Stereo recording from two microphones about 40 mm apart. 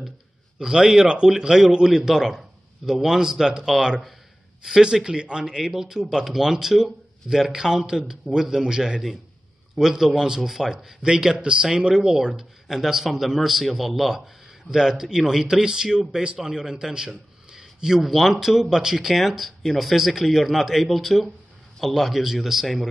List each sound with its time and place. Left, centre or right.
0.6 s speech: centre
11.0 s a man's voice: right
18.0 s speech: centre